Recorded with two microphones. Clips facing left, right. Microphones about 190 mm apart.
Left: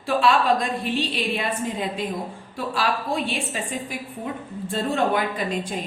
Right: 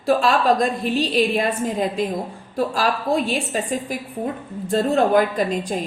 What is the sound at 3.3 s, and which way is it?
A woman's voice, 40° right (ahead or behind).